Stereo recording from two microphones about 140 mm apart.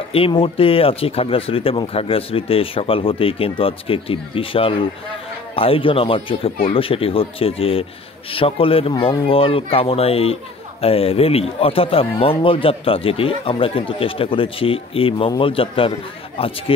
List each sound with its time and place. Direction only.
0.1 s speech: 40° left (ahead or behind)